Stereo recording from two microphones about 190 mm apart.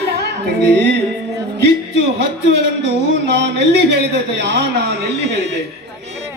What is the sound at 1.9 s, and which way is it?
Music, 60° right (ahead or behind).